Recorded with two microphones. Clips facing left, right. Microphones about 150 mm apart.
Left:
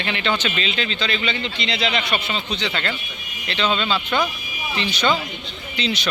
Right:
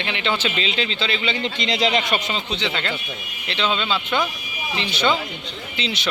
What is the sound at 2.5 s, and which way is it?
A man's voice, 20° right (ahead or behind).